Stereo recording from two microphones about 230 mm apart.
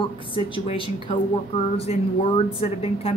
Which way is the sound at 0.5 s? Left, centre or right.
Left.